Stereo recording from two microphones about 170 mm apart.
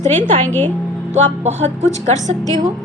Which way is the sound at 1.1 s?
40° right (ahead or behind).